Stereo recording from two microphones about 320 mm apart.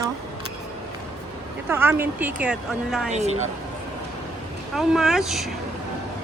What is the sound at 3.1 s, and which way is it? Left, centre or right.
Speech, right.